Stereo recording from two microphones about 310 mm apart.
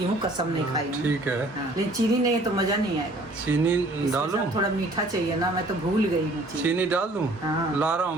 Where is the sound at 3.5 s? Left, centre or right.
Centre.